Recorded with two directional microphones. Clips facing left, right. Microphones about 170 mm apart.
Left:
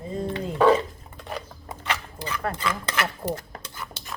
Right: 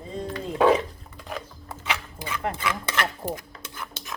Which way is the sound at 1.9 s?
10° right (ahead or behind).